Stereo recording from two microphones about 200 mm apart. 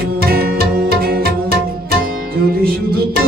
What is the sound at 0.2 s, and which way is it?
Music, 50° right (ahead or behind).